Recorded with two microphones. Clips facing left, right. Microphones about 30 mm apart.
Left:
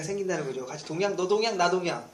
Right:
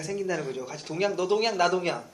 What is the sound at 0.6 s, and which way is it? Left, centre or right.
Speech, right.